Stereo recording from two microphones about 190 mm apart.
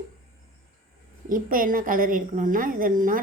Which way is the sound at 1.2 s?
45° right (ahead or behind).